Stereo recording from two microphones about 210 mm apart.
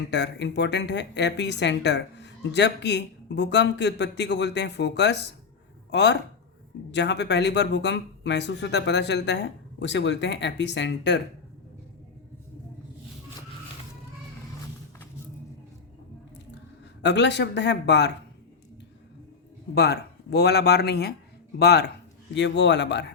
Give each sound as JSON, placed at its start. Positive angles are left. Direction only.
{"t": 0.1, "sound": "speech", "side_deg": 55}
{"t": 17.0, "sound": "speech", "side_deg": 55}
{"t": 19.7, "sound": "speech", "side_deg": 50}